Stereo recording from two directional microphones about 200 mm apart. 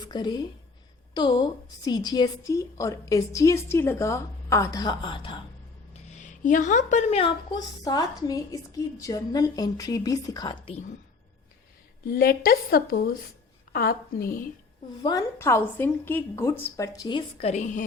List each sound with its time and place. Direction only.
0.0 s a woman's voice: 20° left (ahead or behind)
5.9 s speech: 35° left (ahead or behind)
12.0 s a woman's voice: 45° left (ahead or behind)
15.0 s a woman's voice: 15° left (ahead or behind)
17.5 s a woman's voice: 35° left (ahead or behind)